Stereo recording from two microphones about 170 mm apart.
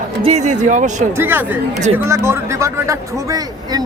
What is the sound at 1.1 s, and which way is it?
Speech, 15° right (ahead or behind).